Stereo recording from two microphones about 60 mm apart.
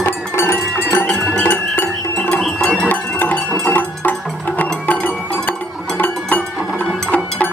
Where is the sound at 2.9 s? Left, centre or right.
Left.